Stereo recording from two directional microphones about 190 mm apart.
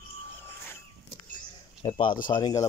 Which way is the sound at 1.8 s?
25° left (ahead or behind).